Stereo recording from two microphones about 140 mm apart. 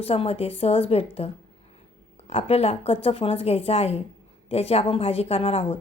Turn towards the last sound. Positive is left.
turn(degrees=45)  # may be behind; listen again after turning